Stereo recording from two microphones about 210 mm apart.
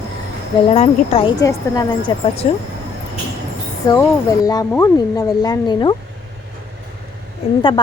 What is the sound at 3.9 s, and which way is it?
Speech, 15° left (ahead or behind).